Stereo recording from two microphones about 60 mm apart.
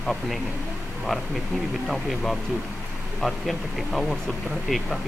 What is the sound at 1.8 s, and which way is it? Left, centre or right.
Speech, centre.